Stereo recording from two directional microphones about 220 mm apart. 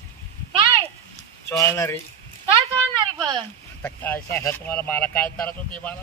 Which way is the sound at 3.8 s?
5° left (ahead or behind).